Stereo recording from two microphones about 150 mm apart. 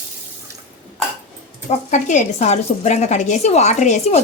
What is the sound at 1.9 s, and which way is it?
A woman's voice, 55° left (ahead or behind).